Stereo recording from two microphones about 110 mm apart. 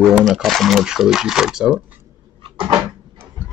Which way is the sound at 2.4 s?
50° right (ahead or behind).